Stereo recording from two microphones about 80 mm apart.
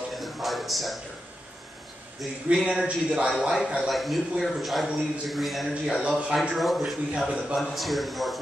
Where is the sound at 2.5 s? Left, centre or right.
Centre.